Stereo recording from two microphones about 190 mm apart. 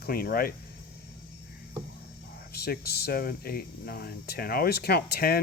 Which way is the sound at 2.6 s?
55° left (ahead or behind).